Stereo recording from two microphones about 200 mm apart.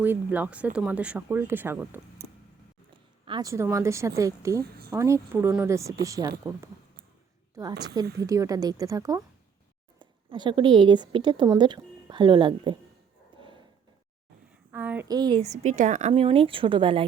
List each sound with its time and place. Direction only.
0.0 s speech: 10° right (ahead or behind)
3.2 s a woman's voice: 20° right (ahead or behind)
14.7 s a woman's voice: 10° right (ahead or behind)
15.4 s a woman's voice: 35° right (ahead or behind)